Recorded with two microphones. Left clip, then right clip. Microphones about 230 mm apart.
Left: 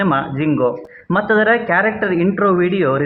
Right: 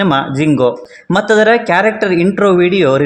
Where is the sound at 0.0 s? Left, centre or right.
Right.